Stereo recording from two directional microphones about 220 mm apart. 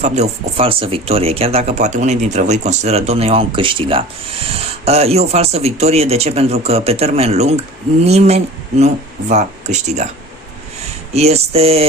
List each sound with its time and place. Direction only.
0.0 s speech: 30° right (ahead or behind)
11.1 s speech: 30° right (ahead or behind)